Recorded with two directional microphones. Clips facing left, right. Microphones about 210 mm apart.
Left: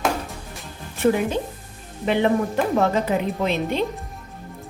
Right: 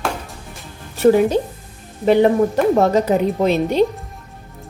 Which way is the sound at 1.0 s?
40° right (ahead or behind).